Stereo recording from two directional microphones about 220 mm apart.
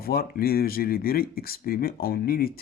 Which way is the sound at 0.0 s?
45° left (ahead or behind).